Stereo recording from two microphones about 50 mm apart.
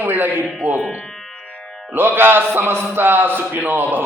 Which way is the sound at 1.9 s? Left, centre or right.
Right.